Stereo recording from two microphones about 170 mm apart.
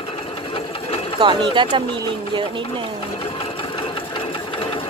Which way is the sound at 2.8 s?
30° left (ahead or behind).